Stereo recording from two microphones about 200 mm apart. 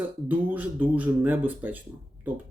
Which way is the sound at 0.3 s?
10° right (ahead or behind).